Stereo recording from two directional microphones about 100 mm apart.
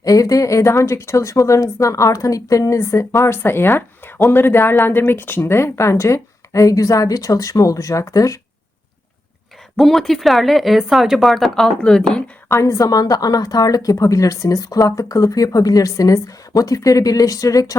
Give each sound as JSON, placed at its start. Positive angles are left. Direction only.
{"t": 0.0, "sound": "speech", "side_deg": 35}
{"t": 9.7, "sound": "speech", "side_deg": 0}
{"t": 12.5, "sound": "speech", "side_deg": 30}